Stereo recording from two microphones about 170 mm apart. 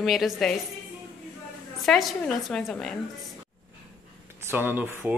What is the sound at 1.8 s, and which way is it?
A woman's voice, centre (ahead or behind).